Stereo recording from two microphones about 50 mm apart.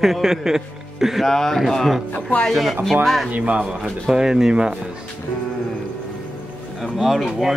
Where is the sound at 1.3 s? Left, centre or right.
Centre.